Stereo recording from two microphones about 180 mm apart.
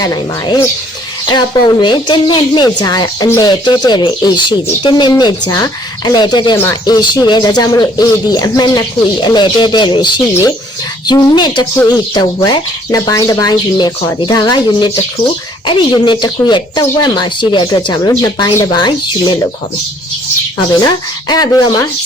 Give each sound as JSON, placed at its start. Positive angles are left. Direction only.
{"t": 0.0, "sound": "speech", "side_deg": 20}
{"t": 20.8, "sound": "speech", "side_deg": 20}